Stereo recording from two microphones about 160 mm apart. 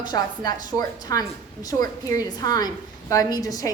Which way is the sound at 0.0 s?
25° left (ahead or behind).